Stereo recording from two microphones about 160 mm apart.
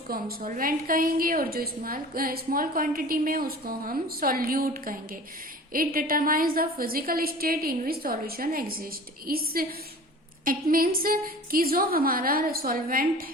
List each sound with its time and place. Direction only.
0.1 s a woman's voice: 65° right (ahead or behind)